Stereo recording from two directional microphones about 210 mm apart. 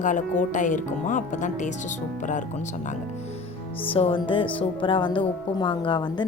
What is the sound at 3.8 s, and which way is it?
Speech, 25° left (ahead or behind).